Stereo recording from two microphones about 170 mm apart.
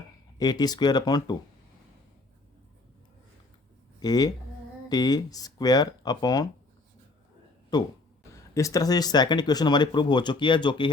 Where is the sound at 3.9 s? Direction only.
25° left (ahead or behind).